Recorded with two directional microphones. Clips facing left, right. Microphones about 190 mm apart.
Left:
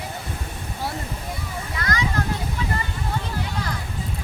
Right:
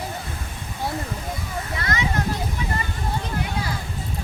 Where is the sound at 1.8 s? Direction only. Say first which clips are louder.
Left 2 dB; 25° right (ahead or behind).